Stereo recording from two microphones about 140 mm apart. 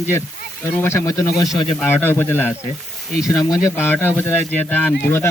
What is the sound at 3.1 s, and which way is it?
Speech, 5° right (ahead or behind).